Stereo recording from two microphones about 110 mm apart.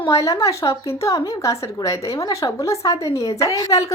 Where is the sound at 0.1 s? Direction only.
30° left (ahead or behind).